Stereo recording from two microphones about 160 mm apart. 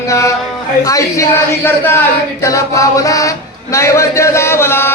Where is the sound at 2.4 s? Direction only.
20° left (ahead or behind).